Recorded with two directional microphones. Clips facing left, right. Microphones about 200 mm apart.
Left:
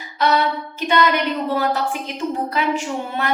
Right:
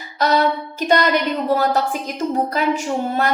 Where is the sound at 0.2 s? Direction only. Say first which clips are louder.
Right 1 dB; 40° right (ahead or behind).